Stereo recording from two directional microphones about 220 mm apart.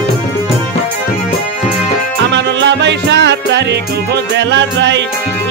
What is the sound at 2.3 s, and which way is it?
Music, 55° right (ahead or behind).